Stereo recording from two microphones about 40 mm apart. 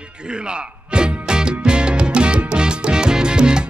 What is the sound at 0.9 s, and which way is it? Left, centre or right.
Music, right.